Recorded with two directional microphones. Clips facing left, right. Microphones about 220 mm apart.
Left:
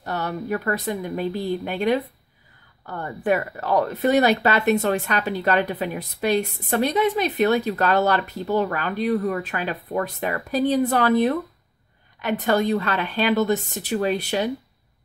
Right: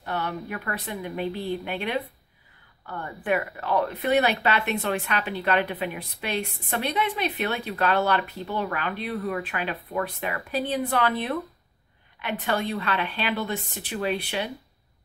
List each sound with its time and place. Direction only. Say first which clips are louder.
0.0 s speech: left 3 dB; 40° left (ahead or behind)